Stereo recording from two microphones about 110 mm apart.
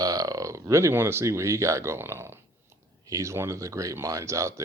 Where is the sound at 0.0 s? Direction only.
35° right (ahead or behind).